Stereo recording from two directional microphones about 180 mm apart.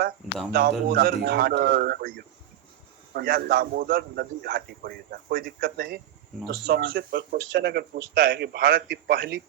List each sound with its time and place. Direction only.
0.5 s a man's voice: 60° right (ahead or behind)
7.2 s a man's voice: 70° right (ahead or behind)